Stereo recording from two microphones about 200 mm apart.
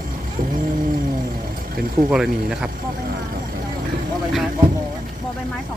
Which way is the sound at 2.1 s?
5° right (ahead or behind).